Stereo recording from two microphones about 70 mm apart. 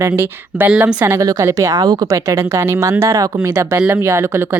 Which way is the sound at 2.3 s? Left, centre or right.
Right.